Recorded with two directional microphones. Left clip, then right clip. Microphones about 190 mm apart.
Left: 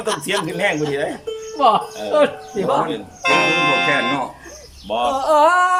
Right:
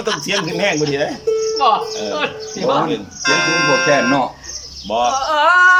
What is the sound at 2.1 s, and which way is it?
Speech, 30° left (ahead or behind).